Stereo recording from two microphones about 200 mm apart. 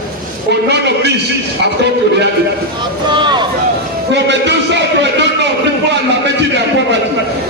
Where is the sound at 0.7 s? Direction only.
55° right (ahead or behind).